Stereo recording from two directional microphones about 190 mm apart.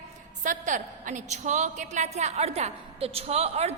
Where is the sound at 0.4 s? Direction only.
40° right (ahead or behind).